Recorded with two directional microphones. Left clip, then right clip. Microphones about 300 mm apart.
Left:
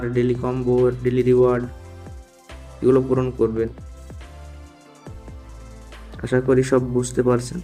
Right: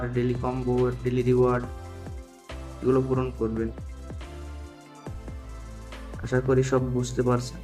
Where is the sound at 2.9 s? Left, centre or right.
Centre.